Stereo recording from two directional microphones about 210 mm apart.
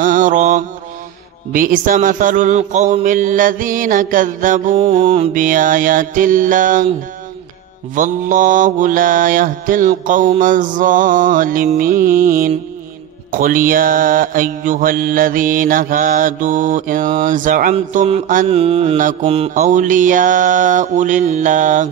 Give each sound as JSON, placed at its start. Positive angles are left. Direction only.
{"t": 0.0, "sound": "mantra", "side_deg": -40}
{"t": 4.7, "sound": "mantra", "side_deg": -25}
{"t": 5.4, "sound": "mantra", "side_deg": -40}
{"t": 7.9, "sound": "mantra", "side_deg": -40}
{"t": 17.7, "sound": "mantra", "side_deg": -30}